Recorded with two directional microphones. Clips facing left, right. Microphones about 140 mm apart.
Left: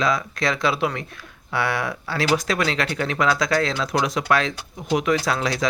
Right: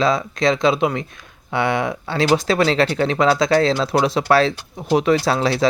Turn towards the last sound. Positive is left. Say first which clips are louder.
# right 5 dB
turn(degrees=-30)  # may be behind; listen again after turning